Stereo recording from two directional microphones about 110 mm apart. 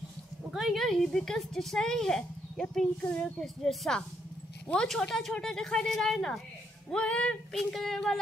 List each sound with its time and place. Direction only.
0.5 s a woman's voice: centre (ahead or behind)